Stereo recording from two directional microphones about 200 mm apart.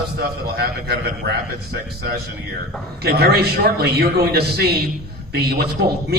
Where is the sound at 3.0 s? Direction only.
55° right (ahead or behind).